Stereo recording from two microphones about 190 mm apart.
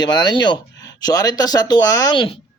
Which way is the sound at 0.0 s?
20° left (ahead or behind).